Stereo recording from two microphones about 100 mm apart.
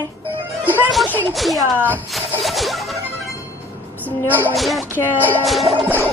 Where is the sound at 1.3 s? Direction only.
Centre (ahead or behind).